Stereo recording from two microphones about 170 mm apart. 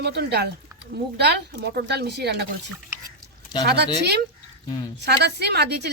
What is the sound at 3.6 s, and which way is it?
A woman's voice, 75° right (ahead or behind).